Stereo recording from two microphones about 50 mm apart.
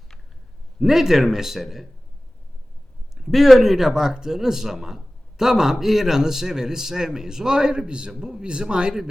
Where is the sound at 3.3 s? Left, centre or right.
Centre.